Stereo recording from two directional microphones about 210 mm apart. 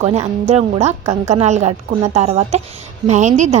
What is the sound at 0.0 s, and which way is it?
A woman's voice, 30° right (ahead or behind).